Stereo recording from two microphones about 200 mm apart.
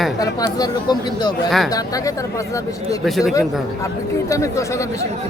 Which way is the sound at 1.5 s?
Centre (ahead or behind).